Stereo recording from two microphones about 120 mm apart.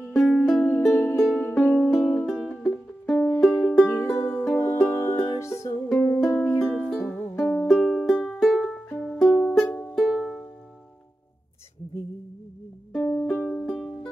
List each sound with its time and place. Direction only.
0.1 s music: centre (ahead or behind)
0.4 s music: 10° left (ahead or behind)
3.9 s music: 20° left (ahead or behind)
5.9 s music: 5° left (ahead or behind)
10.0 s music: 5° right (ahead or behind)
12.9 s music: 15° left (ahead or behind)